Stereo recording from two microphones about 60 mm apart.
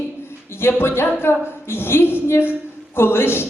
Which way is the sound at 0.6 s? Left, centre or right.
Left.